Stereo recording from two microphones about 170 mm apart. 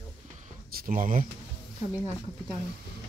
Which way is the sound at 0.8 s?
55° right (ahead or behind).